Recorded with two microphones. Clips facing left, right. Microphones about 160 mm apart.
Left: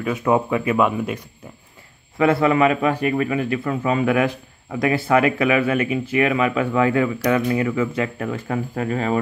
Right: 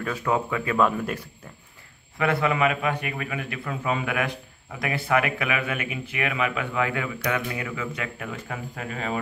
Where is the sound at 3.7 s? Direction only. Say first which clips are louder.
Left 6 dB; 45° left (ahead or behind).